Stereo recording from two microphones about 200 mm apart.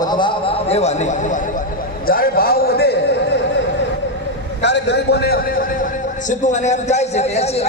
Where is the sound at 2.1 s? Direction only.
50° left (ahead or behind).